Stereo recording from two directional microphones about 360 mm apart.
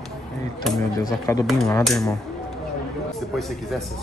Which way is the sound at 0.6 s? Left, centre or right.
Centre.